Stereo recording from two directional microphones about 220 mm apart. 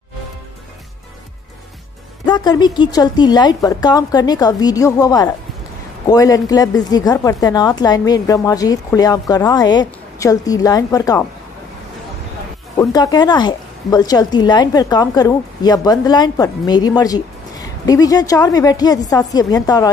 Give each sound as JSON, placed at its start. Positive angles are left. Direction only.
{"t": 2.2, "sound": "a woman's voice", "side_deg": 20}
{"t": 12.7, "sound": "a woman's voice", "side_deg": 15}